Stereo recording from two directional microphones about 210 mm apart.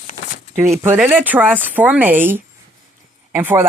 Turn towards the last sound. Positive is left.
turn(degrees=-10)  # may be behind; listen again after turning